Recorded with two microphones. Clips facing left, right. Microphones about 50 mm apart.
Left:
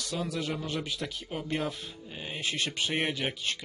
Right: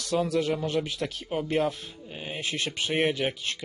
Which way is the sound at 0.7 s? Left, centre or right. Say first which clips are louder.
Right 5 dB; right.